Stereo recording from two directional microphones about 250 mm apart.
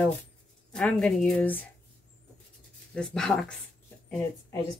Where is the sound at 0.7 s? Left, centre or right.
Centre.